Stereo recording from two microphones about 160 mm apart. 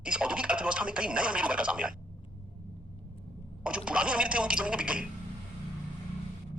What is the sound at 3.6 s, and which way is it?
Speech, 5° right (ahead or behind).